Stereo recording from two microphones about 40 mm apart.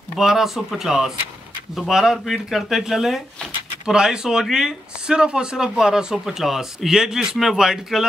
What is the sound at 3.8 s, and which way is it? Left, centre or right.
Speech, centre.